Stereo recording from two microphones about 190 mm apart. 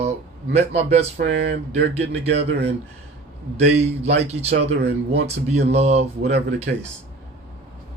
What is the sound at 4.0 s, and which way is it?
Speech, 35° right (ahead or behind).